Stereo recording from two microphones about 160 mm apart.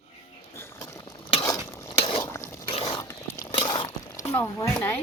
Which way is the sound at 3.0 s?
20° left (ahead or behind).